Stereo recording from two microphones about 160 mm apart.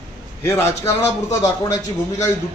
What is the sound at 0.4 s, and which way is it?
A man's voice, 15° left (ahead or behind).